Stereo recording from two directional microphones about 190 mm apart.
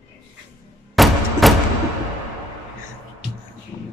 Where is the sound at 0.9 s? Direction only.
Centre (ahead or behind).